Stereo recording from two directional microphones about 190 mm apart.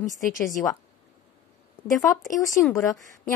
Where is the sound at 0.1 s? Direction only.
45° left (ahead or behind).